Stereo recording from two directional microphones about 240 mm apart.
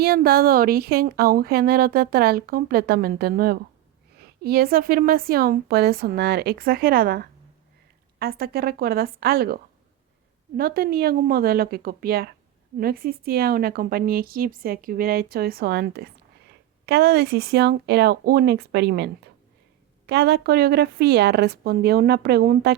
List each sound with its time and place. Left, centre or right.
0.0 s a woman's voice: right
10.6 s a woman's voice: right